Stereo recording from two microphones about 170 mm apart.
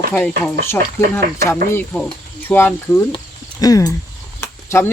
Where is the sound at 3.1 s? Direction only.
20° left (ahead or behind).